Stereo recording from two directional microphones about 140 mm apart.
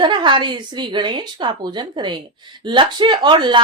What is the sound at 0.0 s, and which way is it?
A woman's voice, 35° right (ahead or behind).